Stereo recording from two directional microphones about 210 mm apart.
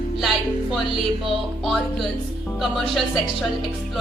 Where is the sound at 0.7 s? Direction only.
Centre (ahead or behind).